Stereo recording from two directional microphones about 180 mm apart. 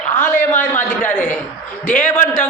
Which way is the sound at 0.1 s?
10° left (ahead or behind).